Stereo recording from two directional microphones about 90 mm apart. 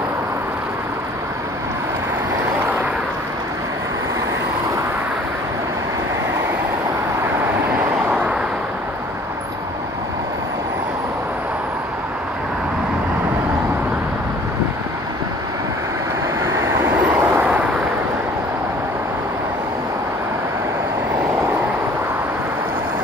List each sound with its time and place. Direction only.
8.1 s vehicle: 15° right (ahead or behind)
16.4 s vehicle: 25° right (ahead or behind)